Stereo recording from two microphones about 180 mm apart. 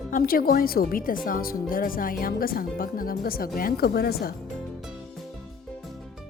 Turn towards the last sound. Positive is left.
turn(degrees=60)  # may be behind; listen again after turning